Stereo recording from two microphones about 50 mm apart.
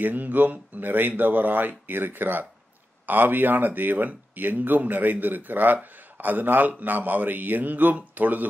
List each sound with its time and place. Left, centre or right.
0.0 s speech: right